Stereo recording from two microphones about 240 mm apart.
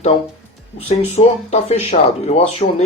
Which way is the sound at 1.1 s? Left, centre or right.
Left.